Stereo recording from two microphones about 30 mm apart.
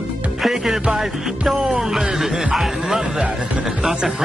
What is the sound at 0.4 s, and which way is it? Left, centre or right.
Speech, centre.